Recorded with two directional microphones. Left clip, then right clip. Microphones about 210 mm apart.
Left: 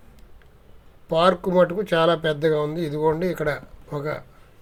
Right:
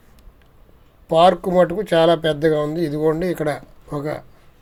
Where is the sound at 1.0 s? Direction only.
15° right (ahead or behind).